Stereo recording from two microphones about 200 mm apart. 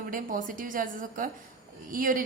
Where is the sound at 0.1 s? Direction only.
45° right (ahead or behind).